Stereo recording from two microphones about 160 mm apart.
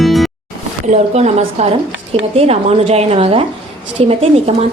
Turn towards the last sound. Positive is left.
turn(degrees=-40)  # may be behind; listen again after turning